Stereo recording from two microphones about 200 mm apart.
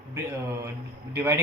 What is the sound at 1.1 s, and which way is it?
Speech, 10° right (ahead or behind).